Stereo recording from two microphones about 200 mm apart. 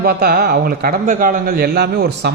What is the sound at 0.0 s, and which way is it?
A man's voice, 50° right (ahead or behind).